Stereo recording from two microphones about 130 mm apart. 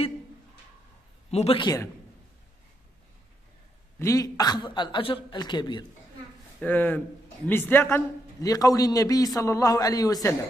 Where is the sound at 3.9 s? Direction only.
25° left (ahead or behind).